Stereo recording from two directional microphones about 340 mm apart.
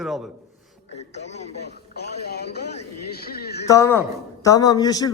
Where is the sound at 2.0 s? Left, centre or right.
Left.